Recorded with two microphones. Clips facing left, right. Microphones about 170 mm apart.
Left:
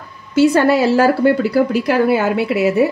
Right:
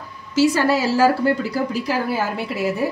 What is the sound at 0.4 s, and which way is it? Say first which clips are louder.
A woman's voice: left 5 dB; 60° left (ahead or behind).